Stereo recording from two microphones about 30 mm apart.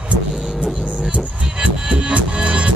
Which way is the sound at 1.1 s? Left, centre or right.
Right.